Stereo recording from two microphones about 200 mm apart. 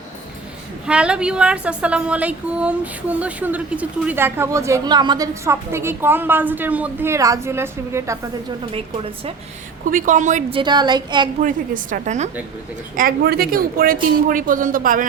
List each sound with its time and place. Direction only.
0.9 s a woman's voice: 5° right (ahead or behind)
9.9 s a woman's voice: 40° right (ahead or behind)
10.6 s speech: 20° right (ahead or behind)
11.4 s a woman's voice: 40° right (ahead or behind)
13.0 s speech: 50° right (ahead or behind)